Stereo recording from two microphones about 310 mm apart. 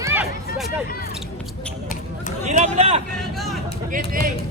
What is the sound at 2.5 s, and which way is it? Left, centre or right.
Speech, right.